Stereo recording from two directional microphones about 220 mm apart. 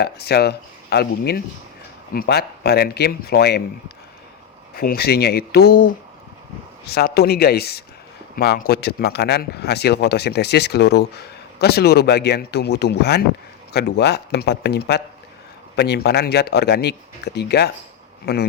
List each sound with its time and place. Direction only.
0.0 s speech: 45° left (ahead or behind)